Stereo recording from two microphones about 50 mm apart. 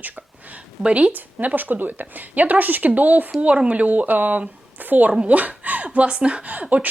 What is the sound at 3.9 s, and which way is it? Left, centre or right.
Speech, right.